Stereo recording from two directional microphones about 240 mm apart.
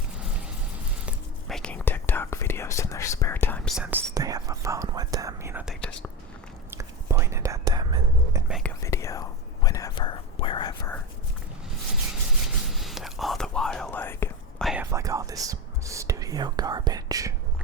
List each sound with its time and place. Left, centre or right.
1.0 s whispering: centre
4.1 s whispering: centre
8.8 s whispering: centre
12.6 s whispering: centre
14.7 s whispering: centre